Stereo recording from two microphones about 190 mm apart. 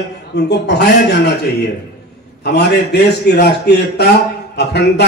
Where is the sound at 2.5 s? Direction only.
60° left (ahead or behind).